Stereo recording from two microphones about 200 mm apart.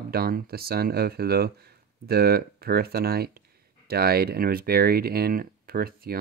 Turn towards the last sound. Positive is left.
turn(degrees=-45)  # may be behind; listen again after turning